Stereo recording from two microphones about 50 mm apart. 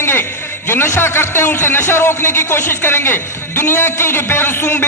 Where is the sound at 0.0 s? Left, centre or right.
Left.